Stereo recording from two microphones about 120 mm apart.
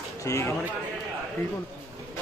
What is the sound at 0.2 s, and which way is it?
Speech, 25° left (ahead or behind).